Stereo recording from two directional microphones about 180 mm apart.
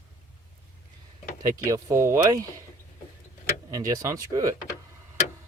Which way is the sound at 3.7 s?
20° right (ahead or behind).